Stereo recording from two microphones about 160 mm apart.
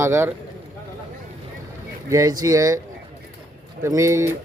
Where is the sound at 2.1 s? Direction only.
20° right (ahead or behind).